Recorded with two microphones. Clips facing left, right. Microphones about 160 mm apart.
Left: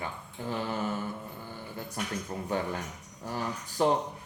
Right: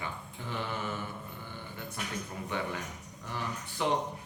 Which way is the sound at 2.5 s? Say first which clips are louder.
Left 4 dB; 40° left (ahead or behind).